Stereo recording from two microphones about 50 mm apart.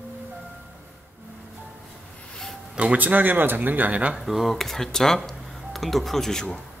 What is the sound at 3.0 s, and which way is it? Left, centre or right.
Speech, right.